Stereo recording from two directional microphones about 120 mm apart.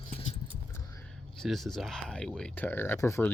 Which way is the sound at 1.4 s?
Centre (ahead or behind).